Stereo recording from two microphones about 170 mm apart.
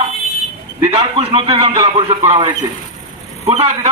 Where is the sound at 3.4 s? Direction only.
40° right (ahead or behind).